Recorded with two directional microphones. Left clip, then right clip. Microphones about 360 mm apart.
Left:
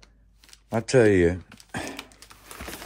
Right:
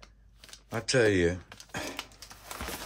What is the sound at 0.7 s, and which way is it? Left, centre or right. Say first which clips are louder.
Speech: left 6 dB; centre.